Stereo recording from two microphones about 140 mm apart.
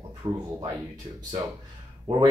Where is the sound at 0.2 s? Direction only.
20° right (ahead or behind).